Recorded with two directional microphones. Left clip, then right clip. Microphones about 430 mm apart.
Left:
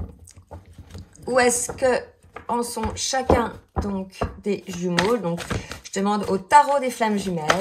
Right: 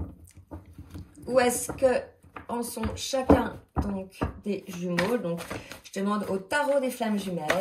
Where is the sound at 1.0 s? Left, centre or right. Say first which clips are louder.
Left 4 dB; centre.